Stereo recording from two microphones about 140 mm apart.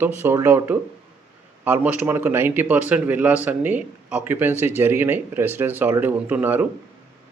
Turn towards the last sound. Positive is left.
turn(degrees=-15)  # may be behind; listen again after turning